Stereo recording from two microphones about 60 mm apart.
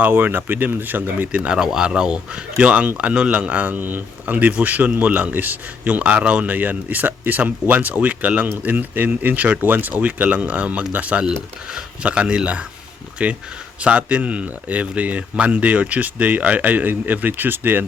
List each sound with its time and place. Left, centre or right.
0.0 s speech: right
1.3 s speech: centre; by 17.8 s right